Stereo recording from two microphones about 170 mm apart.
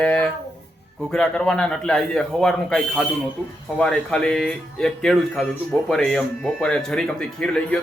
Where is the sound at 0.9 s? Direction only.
5° left (ahead or behind).